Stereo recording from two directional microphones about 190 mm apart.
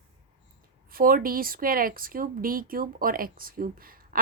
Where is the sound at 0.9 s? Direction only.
50° right (ahead or behind).